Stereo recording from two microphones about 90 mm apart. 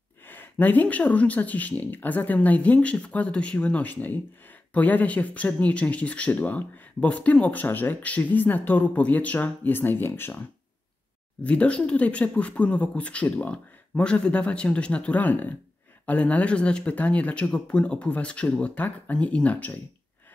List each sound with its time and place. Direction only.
0.2 s speech: 20° left (ahead or behind)
11.4 s speech: 15° left (ahead or behind)